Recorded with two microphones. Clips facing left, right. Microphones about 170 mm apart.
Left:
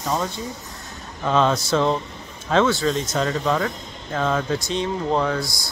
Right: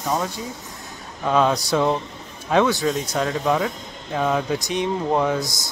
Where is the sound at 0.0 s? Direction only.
5° right (ahead or behind).